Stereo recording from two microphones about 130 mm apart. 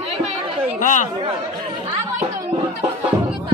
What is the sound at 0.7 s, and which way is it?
Speech, 75° left (ahead or behind).